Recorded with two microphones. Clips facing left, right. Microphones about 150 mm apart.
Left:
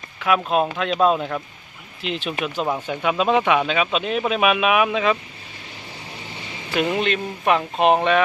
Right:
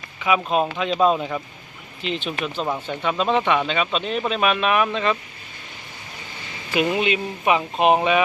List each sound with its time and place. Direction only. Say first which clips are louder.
0.2 s speech: left 1 dB; centre (ahead or behind)
6.7 s speech: even; 5° right (ahead or behind)